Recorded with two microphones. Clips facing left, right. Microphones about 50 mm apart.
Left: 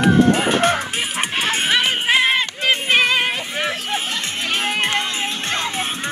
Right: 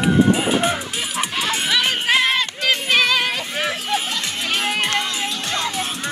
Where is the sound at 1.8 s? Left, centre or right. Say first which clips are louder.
Right 1 dB; centre.